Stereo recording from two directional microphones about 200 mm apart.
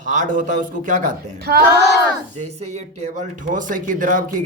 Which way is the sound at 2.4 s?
35° right (ahead or behind).